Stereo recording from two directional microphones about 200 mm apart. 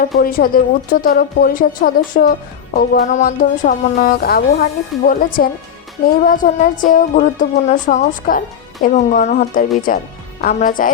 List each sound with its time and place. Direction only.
0.2 s a woman's voice: 45° left (ahead or behind)